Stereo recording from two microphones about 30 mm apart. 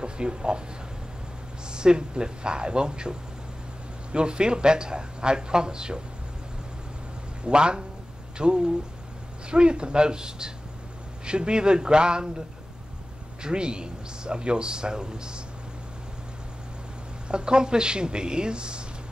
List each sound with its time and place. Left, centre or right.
0.0 s speech: right
1.7 s a man's voice: right
7.4 s a man's voice: right
17.3 s a man's voice: right